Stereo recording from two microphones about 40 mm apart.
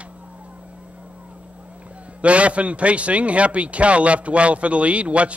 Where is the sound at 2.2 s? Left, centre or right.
Right.